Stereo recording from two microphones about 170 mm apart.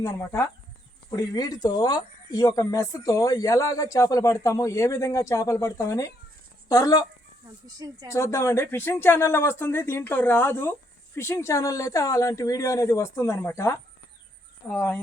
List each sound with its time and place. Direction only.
0.0 s speech: 15° left (ahead or behind)
14.7 s speech: 5° left (ahead or behind)